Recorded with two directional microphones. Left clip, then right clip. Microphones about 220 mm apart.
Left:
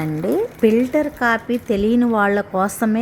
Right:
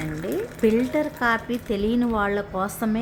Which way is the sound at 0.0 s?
20° left (ahead or behind).